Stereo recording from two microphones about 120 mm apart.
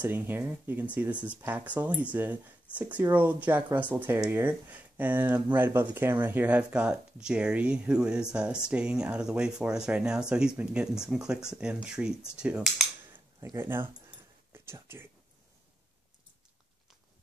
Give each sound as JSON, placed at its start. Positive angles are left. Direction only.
{"t": 0.0, "sound": "speech", "side_deg": -15}
{"t": 13.6, "sound": "speech", "side_deg": -20}
{"t": 14.5, "sound": "a sound", "side_deg": -20}